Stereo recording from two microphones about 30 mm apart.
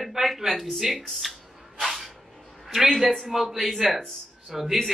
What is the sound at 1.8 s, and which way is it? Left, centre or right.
Cat, centre.